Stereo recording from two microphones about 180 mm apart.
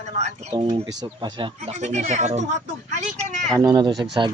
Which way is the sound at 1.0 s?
25° right (ahead or behind).